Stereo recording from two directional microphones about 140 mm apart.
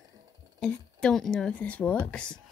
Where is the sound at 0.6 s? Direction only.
5° left (ahead or behind).